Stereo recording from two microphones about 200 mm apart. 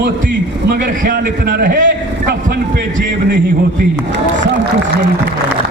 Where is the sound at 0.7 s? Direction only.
50° right (ahead or behind).